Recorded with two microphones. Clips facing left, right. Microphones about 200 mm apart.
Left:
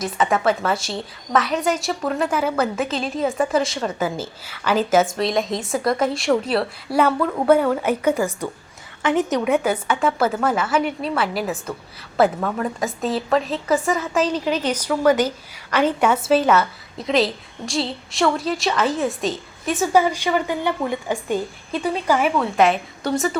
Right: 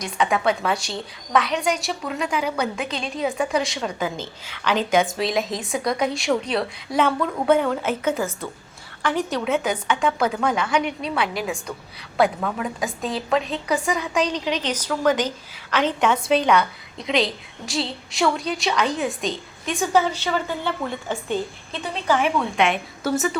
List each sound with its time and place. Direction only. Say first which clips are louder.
0.0 s a woman's voice: left 2 dB; centre (ahead or behind); by 9.4 s 20° left (ahead or behind)
9.4 s a woman's voice: left 3 dB; 10° left (ahead or behind)